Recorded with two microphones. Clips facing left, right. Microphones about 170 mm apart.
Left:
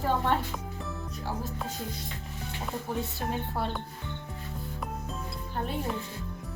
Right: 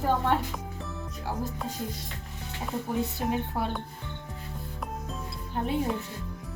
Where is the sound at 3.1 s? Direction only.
10° right (ahead or behind).